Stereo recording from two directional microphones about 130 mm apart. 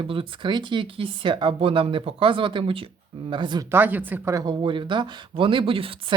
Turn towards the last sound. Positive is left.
turn(degrees=-45)  # may be behind; listen again after turning